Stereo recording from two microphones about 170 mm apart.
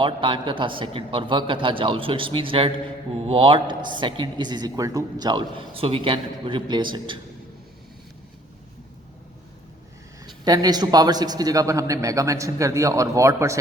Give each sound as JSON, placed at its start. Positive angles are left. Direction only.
{"t": 0.0, "sound": "a man's voice", "side_deg": -30}
{"t": 10.2, "sound": "a man's voice", "side_deg": -20}